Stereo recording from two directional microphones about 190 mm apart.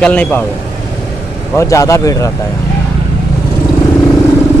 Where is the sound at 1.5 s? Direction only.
15° left (ahead or behind).